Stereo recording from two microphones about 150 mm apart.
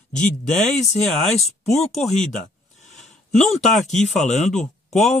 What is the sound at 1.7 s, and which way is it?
Speech, 45° left (ahead or behind).